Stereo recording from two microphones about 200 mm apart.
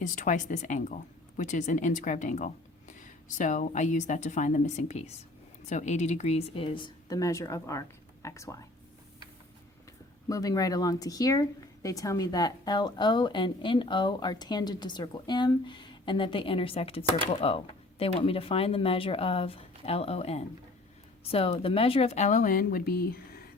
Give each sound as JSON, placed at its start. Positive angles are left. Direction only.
{"t": 0.0, "sound": "speech", "side_deg": 40}
{"t": 10.2, "sound": "speech", "side_deg": 15}